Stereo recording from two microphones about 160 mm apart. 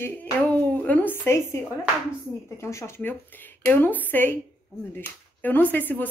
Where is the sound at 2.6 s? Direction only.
15° left (ahead or behind).